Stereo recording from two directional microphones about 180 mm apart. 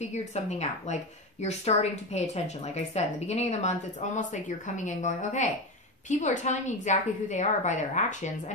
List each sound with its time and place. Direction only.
0.0 s speech: 40° left (ahead or behind)